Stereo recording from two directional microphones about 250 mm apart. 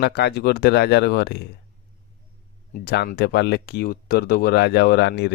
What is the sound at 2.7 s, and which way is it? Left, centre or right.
Speech, left.